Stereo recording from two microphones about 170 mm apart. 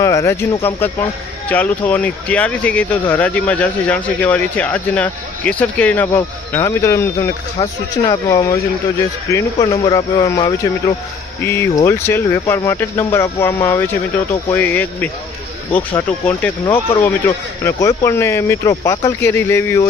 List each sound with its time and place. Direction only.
0.0 s a sound: 20° left (ahead or behind)
1.5 s speech: 10° left (ahead or behind)
11.4 s speech: 15° left (ahead or behind)